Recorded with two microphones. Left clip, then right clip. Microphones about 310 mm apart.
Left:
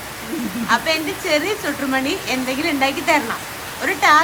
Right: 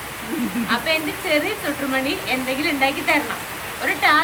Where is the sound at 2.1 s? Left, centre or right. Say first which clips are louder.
Left 1 dB; left.